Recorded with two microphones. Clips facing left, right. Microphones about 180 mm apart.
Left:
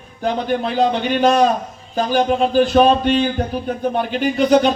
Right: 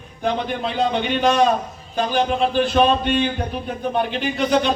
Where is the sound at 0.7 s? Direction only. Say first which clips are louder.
Left 2 dB; 40° left (ahead or behind).